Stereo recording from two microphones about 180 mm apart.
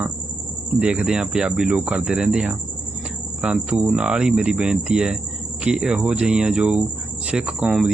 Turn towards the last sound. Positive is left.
turn(degrees=-5)  # may be behind; listen again after turning